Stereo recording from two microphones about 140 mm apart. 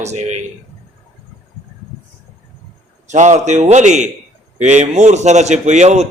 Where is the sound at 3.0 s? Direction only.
60° right (ahead or behind).